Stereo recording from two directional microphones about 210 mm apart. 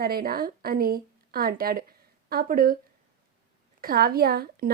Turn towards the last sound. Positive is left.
turn(degrees=-45)  # may be behind; listen again after turning